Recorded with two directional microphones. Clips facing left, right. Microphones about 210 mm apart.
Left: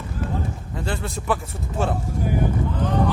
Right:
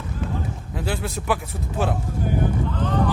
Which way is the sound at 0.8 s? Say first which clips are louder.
Right 1 dB; 5° right (ahead or behind).